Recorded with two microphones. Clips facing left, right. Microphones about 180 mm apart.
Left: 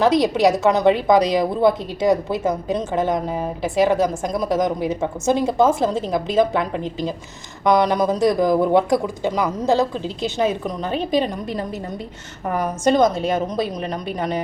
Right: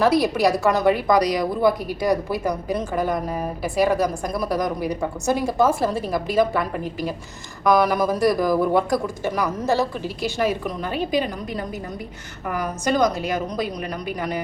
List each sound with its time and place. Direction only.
0.0 s speech: 20° left (ahead or behind)
7.6 s speech: 20° left (ahead or behind)
12.5 s speech: 25° left (ahead or behind)